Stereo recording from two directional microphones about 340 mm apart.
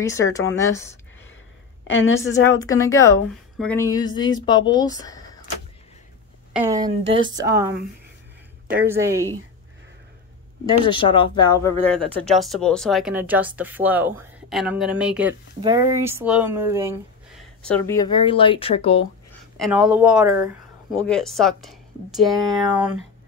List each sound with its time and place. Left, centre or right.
0.0 s a woman's voice: centre
1.9 s a woman's voice: left
2.4 s a woman's voice: centre
6.5 s a woman's voice: centre
8.8 s a woman's voice: centre
10.9 s a woman's voice: centre
12.3 s speech: centre
19.5 s speech: centre